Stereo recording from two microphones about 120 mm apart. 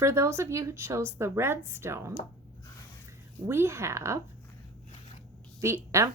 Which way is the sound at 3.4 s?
20° right (ahead or behind).